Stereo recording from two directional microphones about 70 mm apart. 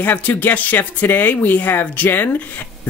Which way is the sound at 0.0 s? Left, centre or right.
Left.